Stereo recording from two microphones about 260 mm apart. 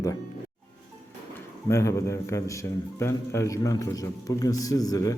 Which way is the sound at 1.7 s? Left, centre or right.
Centre.